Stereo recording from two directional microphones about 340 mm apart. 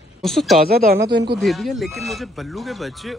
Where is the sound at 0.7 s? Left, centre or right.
Right.